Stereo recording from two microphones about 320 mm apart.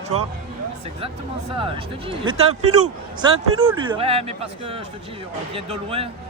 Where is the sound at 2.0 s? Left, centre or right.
Centre.